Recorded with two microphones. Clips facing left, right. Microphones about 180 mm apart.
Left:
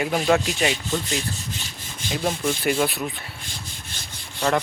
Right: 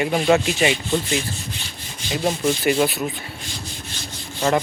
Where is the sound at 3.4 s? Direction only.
55° left (ahead or behind).